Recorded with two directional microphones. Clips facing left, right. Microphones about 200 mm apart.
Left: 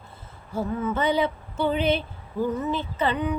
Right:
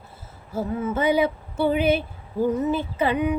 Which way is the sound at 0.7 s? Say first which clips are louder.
Right 1 dB; 25° right (ahead or behind).